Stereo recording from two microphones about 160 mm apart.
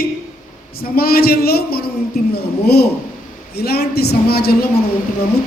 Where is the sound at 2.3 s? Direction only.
85° left.